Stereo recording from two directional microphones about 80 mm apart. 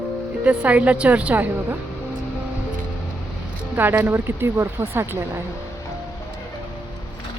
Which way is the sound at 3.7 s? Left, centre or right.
Right.